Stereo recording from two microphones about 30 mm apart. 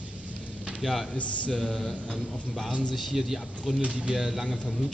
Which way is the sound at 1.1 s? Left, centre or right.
Left.